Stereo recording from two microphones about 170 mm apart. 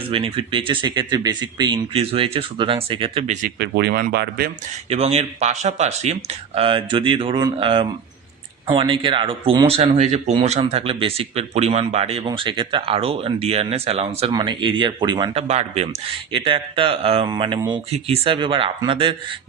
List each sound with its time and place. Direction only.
0.1 s speech: 35° right (ahead or behind)
3.6 s speech: 75° right (ahead or behind)
4.9 s speech: 35° right (ahead or behind)